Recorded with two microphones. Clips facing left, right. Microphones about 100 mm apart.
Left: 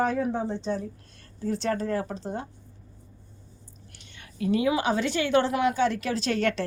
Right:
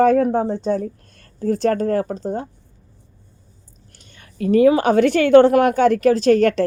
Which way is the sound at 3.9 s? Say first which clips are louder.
Right 6 dB; 40° right (ahead or behind).